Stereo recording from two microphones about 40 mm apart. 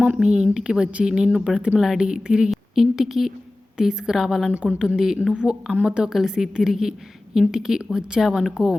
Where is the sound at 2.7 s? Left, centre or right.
Centre.